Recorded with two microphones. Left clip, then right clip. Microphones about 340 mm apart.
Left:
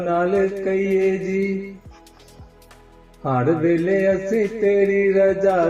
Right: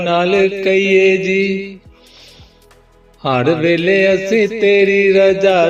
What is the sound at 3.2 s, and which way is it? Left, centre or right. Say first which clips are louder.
Speech: right 5 dB; right.